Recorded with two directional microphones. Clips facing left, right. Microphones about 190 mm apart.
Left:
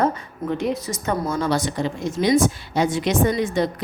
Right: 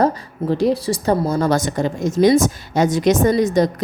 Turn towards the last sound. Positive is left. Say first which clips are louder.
# right 5 dB
turn(degrees=-40)  # may be behind; listen again after turning